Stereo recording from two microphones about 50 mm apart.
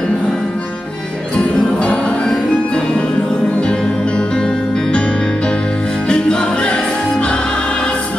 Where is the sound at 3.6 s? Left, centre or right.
Centre.